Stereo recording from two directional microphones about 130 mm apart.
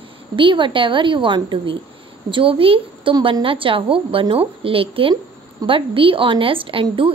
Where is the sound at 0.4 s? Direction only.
40° right (ahead or behind).